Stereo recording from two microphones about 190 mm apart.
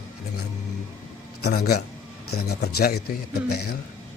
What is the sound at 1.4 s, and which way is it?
Speech, 60° left (ahead or behind).